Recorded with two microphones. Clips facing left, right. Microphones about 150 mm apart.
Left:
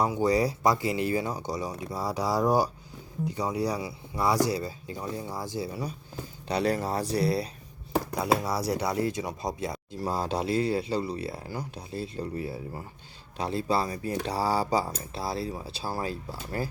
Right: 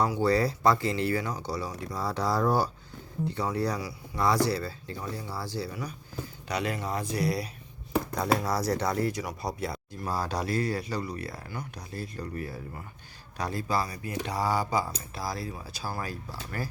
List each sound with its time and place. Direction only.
0.0 s speech: 15° left (ahead or behind)
6.5 s speech: 35° left (ahead or behind)
8.7 s speech: 10° left (ahead or behind)